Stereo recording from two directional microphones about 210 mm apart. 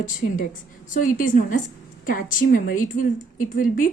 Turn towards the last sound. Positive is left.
turn(degrees=40)  # may be behind; listen again after turning